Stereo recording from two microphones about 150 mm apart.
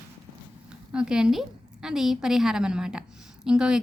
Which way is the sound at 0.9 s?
5° right (ahead or behind).